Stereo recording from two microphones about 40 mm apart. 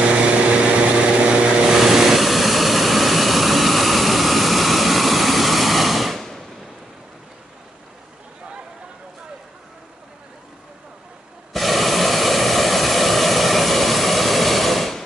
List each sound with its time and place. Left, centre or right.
0.0 s vehicle: right
1.6 s vehicle: centre
11.5 s vehicle: centre